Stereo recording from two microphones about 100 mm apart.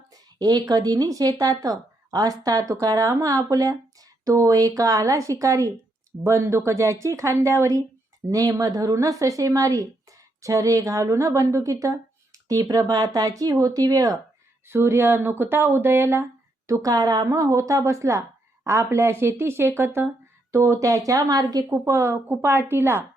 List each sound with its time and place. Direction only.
0.1 s speech: 40° right (ahead or behind)
14.7 s speech: 25° right (ahead or behind)